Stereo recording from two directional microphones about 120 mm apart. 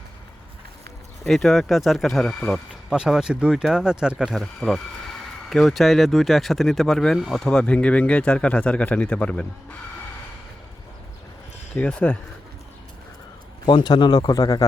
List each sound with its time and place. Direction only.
1.2 s speech: centre (ahead or behind)
2.9 s speech: 5° right (ahead or behind)
11.7 s speech: 10° left (ahead or behind)
13.7 s speech: 35° left (ahead or behind)